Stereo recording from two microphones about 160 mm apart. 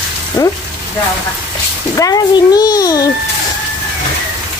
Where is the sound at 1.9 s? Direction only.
25° left (ahead or behind).